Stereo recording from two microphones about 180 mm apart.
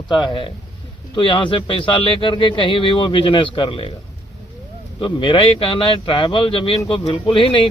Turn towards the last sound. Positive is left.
turn(degrees=30)  # may be behind; listen again after turning